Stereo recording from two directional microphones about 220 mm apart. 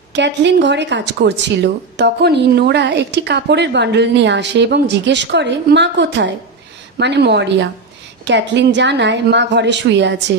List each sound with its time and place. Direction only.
0.1 s a woman's voice: 55° right (ahead or behind)